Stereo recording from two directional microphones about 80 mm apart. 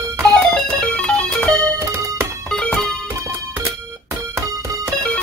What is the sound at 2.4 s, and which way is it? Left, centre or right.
Music, centre.